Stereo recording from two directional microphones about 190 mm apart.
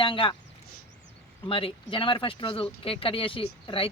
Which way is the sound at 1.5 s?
30° left (ahead or behind).